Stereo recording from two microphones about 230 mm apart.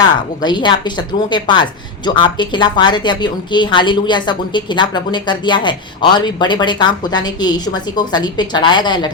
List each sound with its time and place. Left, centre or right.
0.4 s a woman's voice: centre